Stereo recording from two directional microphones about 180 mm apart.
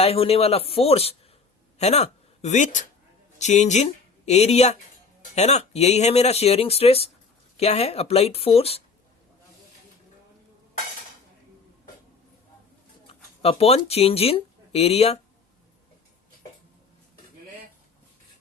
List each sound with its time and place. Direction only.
0.0 s speech: 35° left (ahead or behind)
13.1 s speech: 35° left (ahead or behind)